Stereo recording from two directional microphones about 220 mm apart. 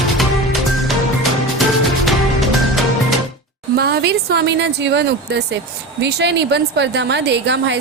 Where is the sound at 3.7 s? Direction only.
45° right (ahead or behind).